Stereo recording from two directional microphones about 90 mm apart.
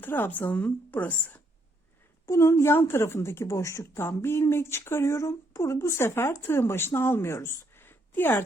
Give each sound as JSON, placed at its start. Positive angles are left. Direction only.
{"t": 0.0, "sound": "speech", "side_deg": 20}
{"t": 2.2, "sound": "speech", "side_deg": 30}